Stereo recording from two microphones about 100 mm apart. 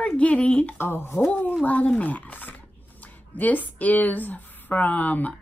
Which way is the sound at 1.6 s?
15° left (ahead or behind).